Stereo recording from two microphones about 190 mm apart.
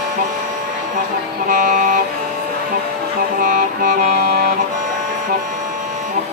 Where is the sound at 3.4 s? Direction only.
50° right (ahead or behind).